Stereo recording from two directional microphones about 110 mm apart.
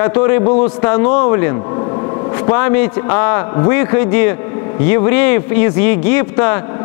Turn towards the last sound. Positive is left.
turn(degrees=25)  # may be behind; listen again after turning